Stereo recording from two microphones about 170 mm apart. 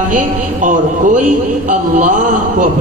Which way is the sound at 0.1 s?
50° right (ahead or behind).